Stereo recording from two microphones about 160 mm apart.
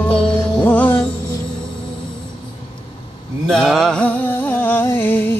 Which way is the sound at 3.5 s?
5° left (ahead or behind).